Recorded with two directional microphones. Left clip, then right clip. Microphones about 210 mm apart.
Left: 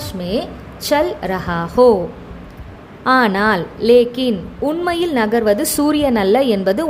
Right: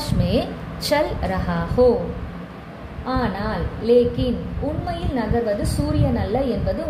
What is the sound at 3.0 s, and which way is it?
A woman's voice, 35° left (ahead or behind).